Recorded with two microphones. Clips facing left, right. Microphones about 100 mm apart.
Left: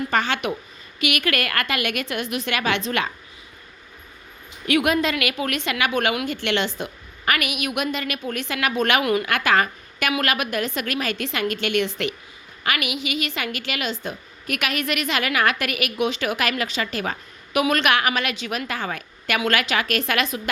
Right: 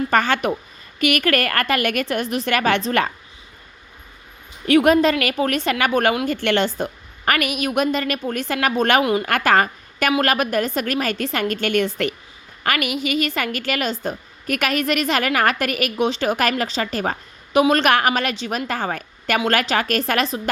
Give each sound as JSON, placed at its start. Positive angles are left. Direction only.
{"t": 0.1, "sound": "a woman's voice", "side_deg": -45}
{"t": 4.6, "sound": "a woman's voice", "side_deg": -35}
{"t": 9.2, "sound": "a woman's voice", "side_deg": -40}